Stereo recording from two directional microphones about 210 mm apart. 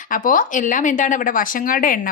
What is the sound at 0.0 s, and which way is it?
Speech, 40° left (ahead or behind).